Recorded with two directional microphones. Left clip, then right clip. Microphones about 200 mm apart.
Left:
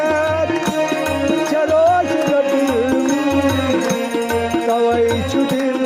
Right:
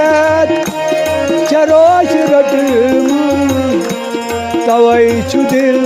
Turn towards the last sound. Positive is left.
turn(degrees=-45)  # may be behind; listen again after turning